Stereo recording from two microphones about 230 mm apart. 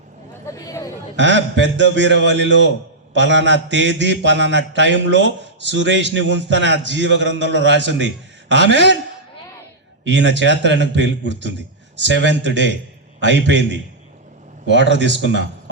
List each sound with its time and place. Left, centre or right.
0.5 s speech: centre
1.1 s a man's voice: right
10.0 s a man's voice: right